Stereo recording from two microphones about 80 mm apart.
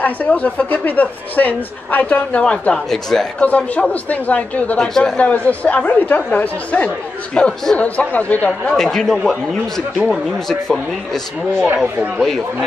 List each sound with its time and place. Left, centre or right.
0.0 s a woman's voice: centre
2.9 s speech: centre
3.3 s a woman's voice: centre
4.7 s speech: centre
8.6 s speech: centre
12.2 s speech: centre